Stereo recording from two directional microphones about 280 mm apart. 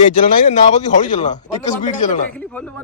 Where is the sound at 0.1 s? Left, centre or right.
Left.